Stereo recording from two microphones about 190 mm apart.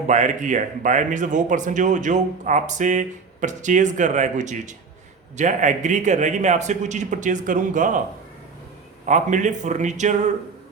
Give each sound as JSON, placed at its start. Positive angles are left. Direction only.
{"t": 0.1, "sound": "speech", "side_deg": -40}
{"t": 9.0, "sound": "speech", "side_deg": -40}